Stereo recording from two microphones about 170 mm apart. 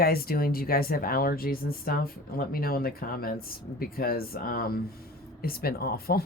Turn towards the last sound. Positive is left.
turn(degrees=65)  # may be behind; listen again after turning